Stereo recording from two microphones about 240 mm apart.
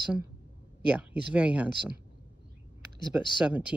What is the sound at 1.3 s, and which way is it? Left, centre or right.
Speech, centre.